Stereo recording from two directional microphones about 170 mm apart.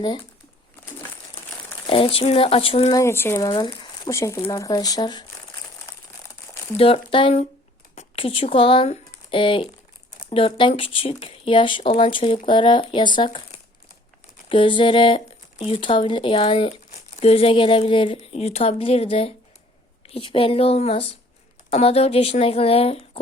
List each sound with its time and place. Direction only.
1.9 s speech: 35° left (ahead or behind)
2.9 s speech: 15° left (ahead or behind)
3.5 s speech: 25° left (ahead or behind)
6.7 s speech: 35° left (ahead or behind)
14.5 s speech: 30° left (ahead or behind)